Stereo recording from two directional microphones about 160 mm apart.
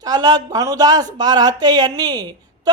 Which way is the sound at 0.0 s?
25° right (ahead or behind).